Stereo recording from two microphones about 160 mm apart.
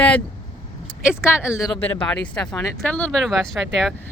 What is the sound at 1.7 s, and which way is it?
Speech, 10° left (ahead or behind).